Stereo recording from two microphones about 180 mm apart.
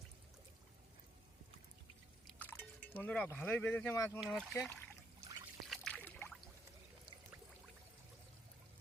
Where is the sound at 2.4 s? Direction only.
10° left (ahead or behind).